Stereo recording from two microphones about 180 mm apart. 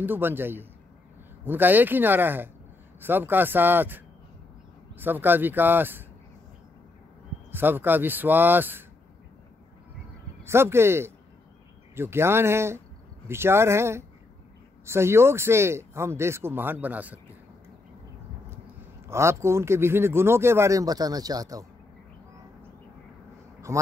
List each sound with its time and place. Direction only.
0.0 s speech: 10° right (ahead or behind)
7.5 s speech: 10° right (ahead or behind)
10.4 s speech: 15° right (ahead or behind)
19.0 s speech: 15° right (ahead or behind)
23.7 s speech: 15° right (ahead or behind)